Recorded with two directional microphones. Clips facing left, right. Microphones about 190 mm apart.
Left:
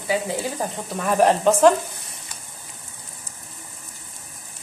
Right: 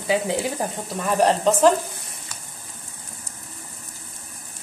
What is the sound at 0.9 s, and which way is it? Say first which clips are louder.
Speech: left 2 dB; 5° left (ahead or behind).